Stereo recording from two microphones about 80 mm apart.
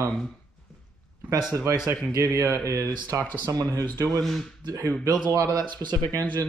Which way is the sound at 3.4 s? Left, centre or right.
Right.